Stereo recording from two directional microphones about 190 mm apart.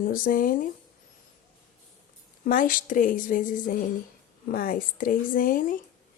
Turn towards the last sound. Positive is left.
turn(degrees=45)  # may be behind; listen again after turning